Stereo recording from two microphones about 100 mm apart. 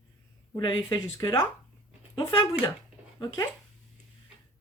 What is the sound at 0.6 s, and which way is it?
Speech, 50° left (ahead or behind).